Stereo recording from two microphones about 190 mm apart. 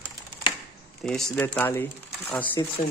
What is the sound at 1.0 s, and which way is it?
Speech, 5° left (ahead or behind).